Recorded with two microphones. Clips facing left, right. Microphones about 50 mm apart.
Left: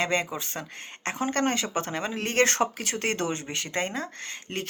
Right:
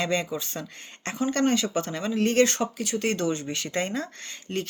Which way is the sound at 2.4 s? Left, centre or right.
Left.